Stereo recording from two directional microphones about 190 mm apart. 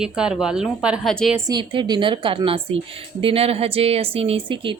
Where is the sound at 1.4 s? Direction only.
25° right (ahead or behind).